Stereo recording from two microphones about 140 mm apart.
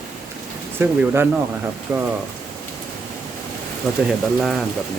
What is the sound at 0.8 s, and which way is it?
Speech, 15° right (ahead or behind).